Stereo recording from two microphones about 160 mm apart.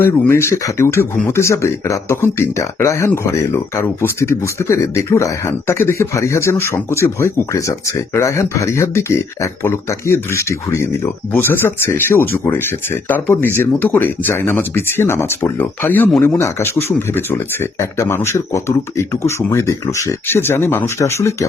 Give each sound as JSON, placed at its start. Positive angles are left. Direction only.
{"t": 0.0, "sound": "speech", "side_deg": 15}